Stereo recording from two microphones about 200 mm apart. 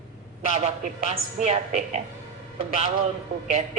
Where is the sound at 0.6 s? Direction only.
35° right (ahead or behind).